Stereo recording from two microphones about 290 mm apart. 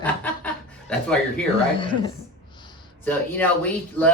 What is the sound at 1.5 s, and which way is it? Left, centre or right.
Speech, centre.